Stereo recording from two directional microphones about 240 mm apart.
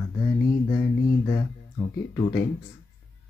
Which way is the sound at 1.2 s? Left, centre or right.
Left.